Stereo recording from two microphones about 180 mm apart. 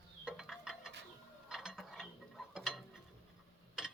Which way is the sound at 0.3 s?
5° right (ahead or behind).